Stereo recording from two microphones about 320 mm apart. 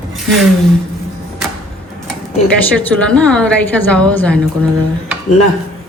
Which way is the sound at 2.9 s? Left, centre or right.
Centre.